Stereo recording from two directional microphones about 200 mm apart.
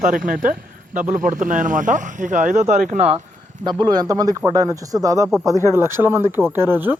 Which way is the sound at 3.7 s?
20° right (ahead or behind).